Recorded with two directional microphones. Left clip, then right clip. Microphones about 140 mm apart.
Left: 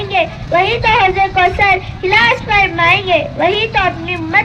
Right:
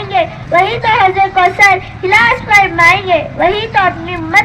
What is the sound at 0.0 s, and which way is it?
A child's voice, 20° left (ahead or behind).